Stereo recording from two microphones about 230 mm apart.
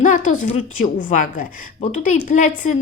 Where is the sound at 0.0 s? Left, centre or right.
Left.